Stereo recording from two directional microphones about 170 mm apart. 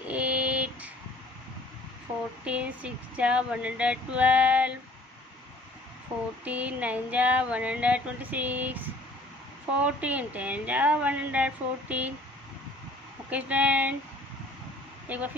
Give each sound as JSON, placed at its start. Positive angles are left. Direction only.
{"t": 0.1, "sound": "a sound", "side_deg": -5}
{"t": 2.4, "sound": "speech", "side_deg": -5}
{"t": 6.4, "sound": "speech", "side_deg": -10}
{"t": 13.3, "sound": "speech", "side_deg": -10}
{"t": 15.0, "sound": "speech", "side_deg": -10}